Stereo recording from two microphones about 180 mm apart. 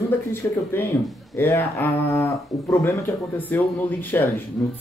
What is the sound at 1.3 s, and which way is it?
Speech, 15° left (ahead or behind).